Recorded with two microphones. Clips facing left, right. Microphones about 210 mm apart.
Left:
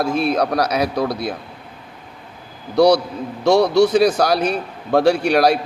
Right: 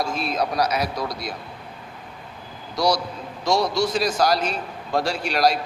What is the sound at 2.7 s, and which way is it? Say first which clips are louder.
A man's voice: left 9 dB; 60° left (ahead or behind).